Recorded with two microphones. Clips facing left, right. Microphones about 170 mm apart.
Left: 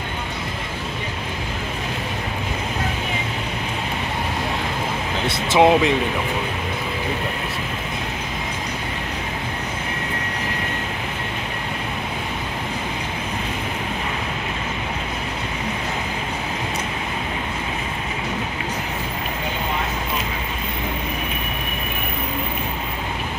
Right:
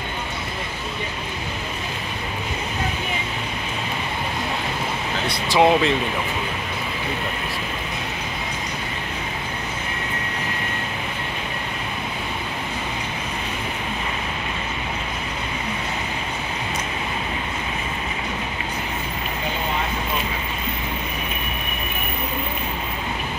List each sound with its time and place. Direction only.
5.5 s speech: 15° left (ahead or behind)